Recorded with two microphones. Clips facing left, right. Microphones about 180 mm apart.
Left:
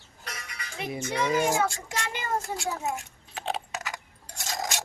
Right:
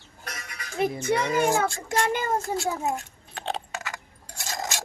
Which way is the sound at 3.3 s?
5° left (ahead or behind).